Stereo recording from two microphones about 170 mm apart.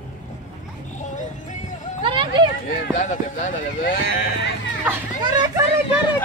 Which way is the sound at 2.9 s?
50° left (ahead or behind).